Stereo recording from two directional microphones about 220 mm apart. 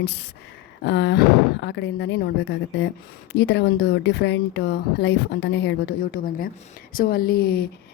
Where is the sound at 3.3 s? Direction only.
55° left (ahead or behind).